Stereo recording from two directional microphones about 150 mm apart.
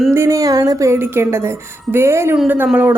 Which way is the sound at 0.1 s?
20° right (ahead or behind).